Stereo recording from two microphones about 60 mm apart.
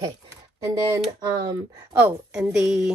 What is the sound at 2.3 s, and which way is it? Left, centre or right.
Speech, centre.